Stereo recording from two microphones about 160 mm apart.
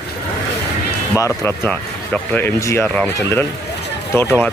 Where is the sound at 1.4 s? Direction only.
10° left (ahead or behind).